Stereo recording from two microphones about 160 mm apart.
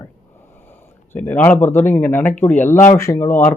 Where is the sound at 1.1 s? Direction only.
10° left (ahead or behind).